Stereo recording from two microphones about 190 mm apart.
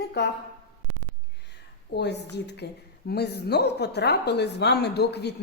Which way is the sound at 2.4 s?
60° left (ahead or behind).